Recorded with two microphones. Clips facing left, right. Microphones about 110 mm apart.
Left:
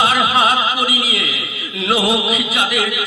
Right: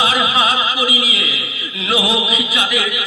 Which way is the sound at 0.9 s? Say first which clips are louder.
Even; 35° left (ahead or behind).